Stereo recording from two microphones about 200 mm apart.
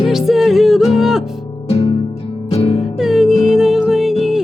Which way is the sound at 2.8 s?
Centre (ahead or behind).